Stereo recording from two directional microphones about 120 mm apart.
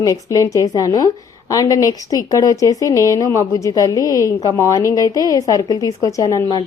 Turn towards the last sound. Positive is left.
turn(degrees=35)  # may be behind; listen again after turning